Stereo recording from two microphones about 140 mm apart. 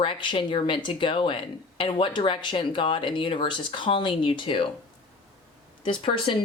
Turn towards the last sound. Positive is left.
turn(degrees=35)  # may be behind; listen again after turning